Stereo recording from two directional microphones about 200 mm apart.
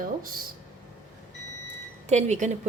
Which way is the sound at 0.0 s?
45° right (ahead or behind).